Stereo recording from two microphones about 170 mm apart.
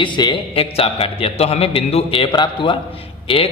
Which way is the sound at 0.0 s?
25° left (ahead or behind).